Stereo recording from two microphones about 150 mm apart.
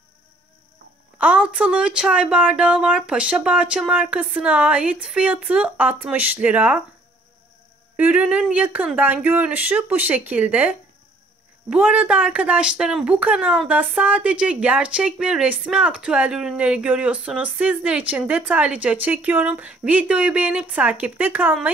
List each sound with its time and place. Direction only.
1.2 s speech: 10° right (ahead or behind)
7.9 s speech: 10° right (ahead or behind)